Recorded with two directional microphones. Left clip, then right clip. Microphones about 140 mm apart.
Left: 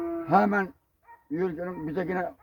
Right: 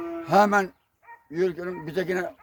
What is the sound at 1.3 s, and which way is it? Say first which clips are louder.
Speech: right 4 dB; 15° right (ahead or behind).